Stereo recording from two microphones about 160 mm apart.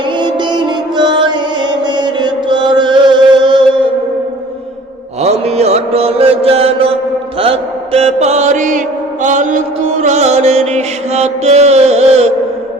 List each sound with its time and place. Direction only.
0.2 s music: 30° right (ahead or behind)
5.2 s mantra: 40° right (ahead or behind)